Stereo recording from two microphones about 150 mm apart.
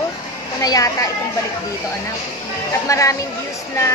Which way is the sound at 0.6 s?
25° left (ahead or behind).